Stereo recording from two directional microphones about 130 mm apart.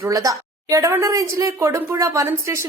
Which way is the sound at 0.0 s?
25° right (ahead or behind).